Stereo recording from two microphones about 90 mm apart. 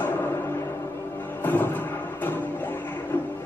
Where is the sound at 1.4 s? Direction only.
20° left (ahead or behind).